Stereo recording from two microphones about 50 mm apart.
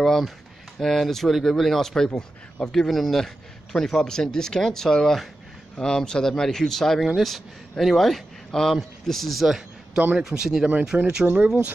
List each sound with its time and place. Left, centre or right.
0.0 s speech: centre
2.9 s a man's voice: centre
9.9 s a man's voice: right
10.2 s speech: centre
10.9 s a man's voice: right